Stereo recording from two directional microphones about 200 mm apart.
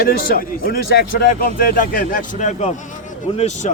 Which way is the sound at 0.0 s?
50° left (ahead or behind).